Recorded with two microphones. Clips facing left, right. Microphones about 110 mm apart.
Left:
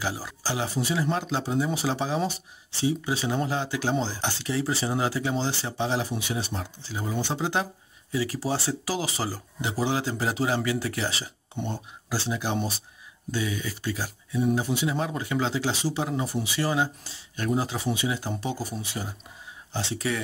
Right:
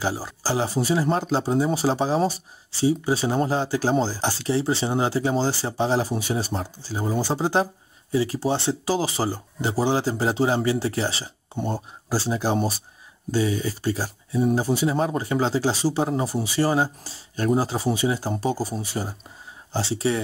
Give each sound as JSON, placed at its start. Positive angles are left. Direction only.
{"t": 0.0, "sound": "speech", "side_deg": -30}